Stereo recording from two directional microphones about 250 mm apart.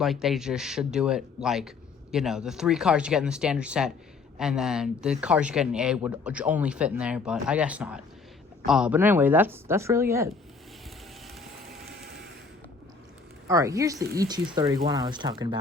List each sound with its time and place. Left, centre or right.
0.0 s speech: centre
13.5 s speech: centre